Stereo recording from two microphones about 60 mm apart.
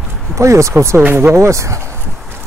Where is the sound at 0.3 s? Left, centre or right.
Right.